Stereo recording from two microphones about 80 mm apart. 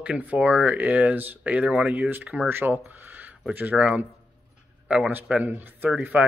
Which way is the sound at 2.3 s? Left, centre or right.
Right.